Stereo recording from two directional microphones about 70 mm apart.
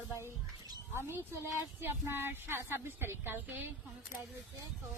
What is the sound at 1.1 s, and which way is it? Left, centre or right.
Speech, right.